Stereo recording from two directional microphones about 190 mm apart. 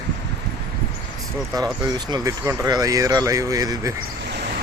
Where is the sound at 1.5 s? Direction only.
20° right (ahead or behind).